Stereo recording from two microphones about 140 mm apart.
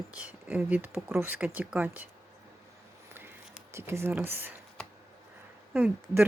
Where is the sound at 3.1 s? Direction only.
15° right (ahead or behind).